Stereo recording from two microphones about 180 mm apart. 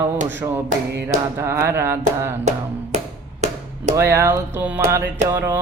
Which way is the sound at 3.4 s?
40° right (ahead or behind).